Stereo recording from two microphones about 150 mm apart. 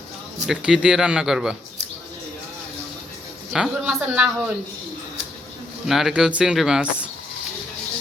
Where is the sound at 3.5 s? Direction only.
5° right (ahead or behind).